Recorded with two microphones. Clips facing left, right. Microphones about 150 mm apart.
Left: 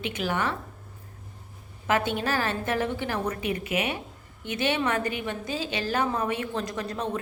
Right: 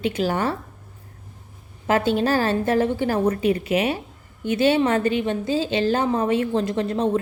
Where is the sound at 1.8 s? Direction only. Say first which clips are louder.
Right 6 dB; 30° right (ahead or behind).